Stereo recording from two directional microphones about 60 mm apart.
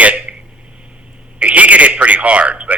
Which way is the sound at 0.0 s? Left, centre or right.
Right.